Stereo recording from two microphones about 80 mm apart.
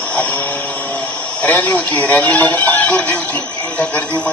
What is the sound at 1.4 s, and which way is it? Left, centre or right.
A man's voice, left.